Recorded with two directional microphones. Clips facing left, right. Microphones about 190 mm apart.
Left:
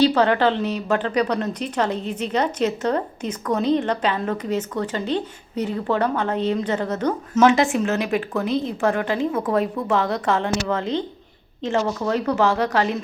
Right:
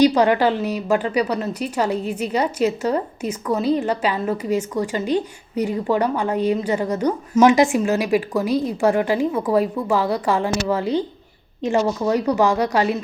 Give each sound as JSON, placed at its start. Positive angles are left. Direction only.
{"t": 0.0, "sound": "a woman's voice", "side_deg": -15}